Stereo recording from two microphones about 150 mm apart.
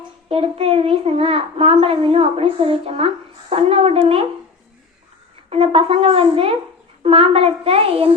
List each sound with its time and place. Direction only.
0.3 s a child's voice: 40° right (ahead or behind)
5.5 s a child's voice: 40° right (ahead or behind)